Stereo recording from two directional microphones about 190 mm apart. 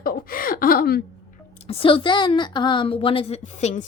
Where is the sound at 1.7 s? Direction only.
30° left (ahead or behind).